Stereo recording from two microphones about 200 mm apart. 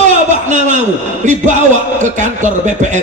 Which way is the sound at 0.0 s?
40° right (ahead or behind).